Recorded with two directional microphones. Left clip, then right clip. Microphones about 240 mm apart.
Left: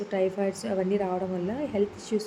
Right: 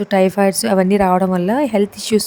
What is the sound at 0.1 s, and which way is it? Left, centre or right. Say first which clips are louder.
Speech: right 13 dB; right.